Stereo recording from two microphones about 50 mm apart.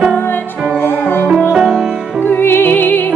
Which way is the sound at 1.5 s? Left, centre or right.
Centre.